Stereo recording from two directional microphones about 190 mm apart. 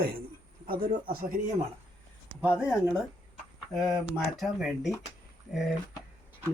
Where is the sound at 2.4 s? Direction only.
5° right (ahead or behind).